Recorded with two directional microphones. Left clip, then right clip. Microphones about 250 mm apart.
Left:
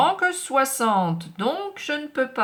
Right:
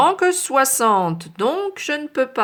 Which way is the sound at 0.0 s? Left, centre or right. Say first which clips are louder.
Right 4 dB; right.